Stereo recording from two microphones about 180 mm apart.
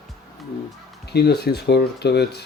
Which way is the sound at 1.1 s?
65° left (ahead or behind).